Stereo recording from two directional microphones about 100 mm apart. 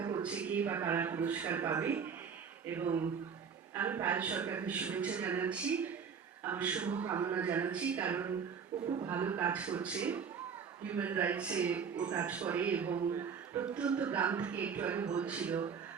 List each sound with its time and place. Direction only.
0.2 s speech: 10° right (ahead or behind)